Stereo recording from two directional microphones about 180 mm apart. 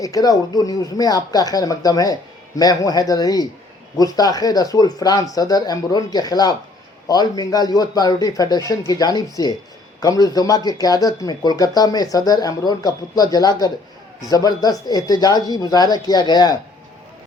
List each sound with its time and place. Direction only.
0.0 s speech: 20° left (ahead or behind)